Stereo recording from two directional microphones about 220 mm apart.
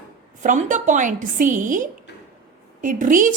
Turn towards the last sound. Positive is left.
turn(degrees=-35)  # may be behind; listen again after turning